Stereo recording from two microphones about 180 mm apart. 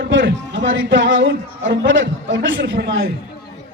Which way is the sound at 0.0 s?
85° right.